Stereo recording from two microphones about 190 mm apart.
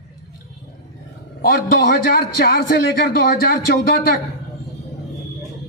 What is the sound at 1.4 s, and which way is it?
A man's voice, 50° left (ahead or behind).